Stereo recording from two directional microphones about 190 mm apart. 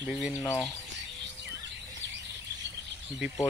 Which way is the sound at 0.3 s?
15° left (ahead or behind).